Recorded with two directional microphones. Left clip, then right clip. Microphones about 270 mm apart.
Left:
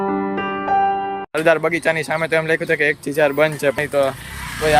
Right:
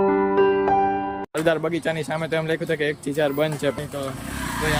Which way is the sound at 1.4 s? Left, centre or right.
Centre.